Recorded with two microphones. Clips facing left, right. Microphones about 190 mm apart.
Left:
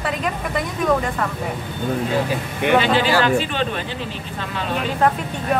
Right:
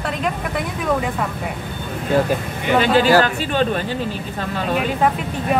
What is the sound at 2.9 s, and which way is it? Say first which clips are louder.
Speech: right 2 dB; 45° right (ahead or behind).